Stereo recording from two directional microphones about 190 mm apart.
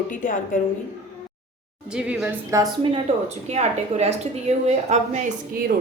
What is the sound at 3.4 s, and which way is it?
A woman's voice, 35° right (ahead or behind).